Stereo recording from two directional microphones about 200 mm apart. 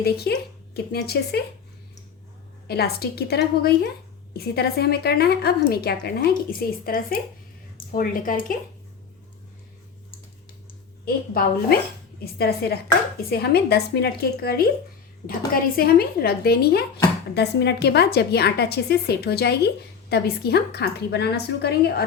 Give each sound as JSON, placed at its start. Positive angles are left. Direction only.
{"t": 0.0, "sound": "a woman's voice", "side_deg": 55}
{"t": 2.6, "sound": "a woman's voice", "side_deg": 50}
{"t": 11.0, "sound": "a woman's voice", "side_deg": 50}